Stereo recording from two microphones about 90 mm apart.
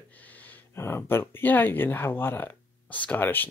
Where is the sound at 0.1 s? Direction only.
20° left (ahead or behind).